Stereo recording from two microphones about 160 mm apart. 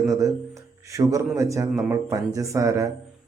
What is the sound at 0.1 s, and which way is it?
A man's voice, 20° right (ahead or behind).